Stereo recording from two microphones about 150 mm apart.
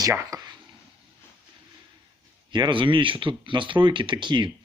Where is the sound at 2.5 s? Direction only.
30° right (ahead or behind).